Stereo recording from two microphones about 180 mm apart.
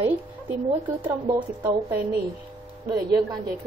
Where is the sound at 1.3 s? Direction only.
20° right (ahead or behind).